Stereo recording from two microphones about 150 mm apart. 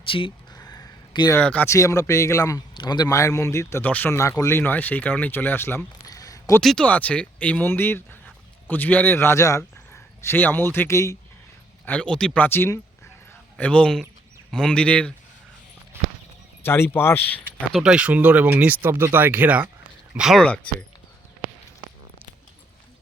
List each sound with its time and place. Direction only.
0.1 s speech: 35° left (ahead or behind)
0.5 s a sound: 25° left (ahead or behind)
1.3 s speech: 10° left (ahead or behind)
6.4 s a man's voice: 5° left (ahead or behind); by 11.2 s 20° left (ahead or behind)
11.9 s speech: 5° left (ahead or behind)
16.6 s speech: 15° left (ahead or behind)
17.7 s speech: 5° right (ahead or behind)
20.4 s speech: 10° left (ahead or behind)